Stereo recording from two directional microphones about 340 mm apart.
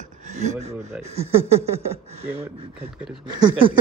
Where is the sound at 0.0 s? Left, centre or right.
Right.